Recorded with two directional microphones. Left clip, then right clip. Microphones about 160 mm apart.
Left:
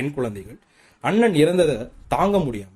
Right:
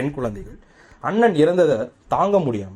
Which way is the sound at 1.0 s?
15° left (ahead or behind).